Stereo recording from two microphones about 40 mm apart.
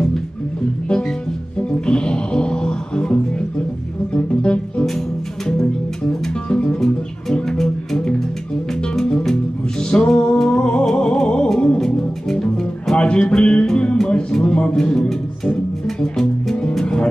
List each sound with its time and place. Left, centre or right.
1.6 s music: left
6.5 s music: left
7.4 s music: centre
12.3 s music: centre
12.9 s music: left
14.0 s a sound: left
15.4 s music: left